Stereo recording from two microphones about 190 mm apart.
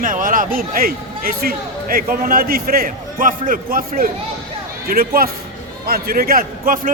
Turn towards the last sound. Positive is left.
turn(degrees=-50)  # may be behind; listen again after turning